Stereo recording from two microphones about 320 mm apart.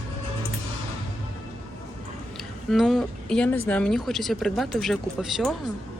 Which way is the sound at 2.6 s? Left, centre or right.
Centre.